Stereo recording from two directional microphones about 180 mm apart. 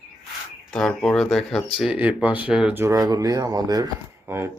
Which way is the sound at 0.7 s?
5° left (ahead or behind).